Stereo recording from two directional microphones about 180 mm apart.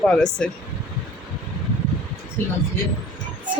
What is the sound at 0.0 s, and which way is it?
Speech, 5° left (ahead or behind).